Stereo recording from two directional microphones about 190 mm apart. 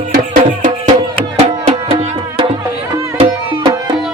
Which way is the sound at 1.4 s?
25° right (ahead or behind).